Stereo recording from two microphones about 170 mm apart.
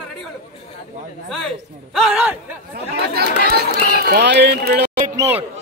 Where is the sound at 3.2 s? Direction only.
65° right (ahead or behind).